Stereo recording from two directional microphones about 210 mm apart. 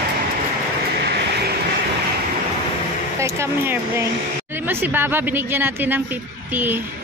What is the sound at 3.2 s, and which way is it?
A woman's voice, 10° right (ahead or behind).